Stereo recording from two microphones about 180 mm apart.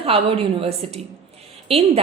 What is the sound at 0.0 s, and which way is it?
A woman's voice, 30° right (ahead or behind).